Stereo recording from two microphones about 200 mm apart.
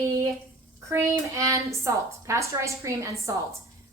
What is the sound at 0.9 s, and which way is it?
A woman's voice, 15° right (ahead or behind).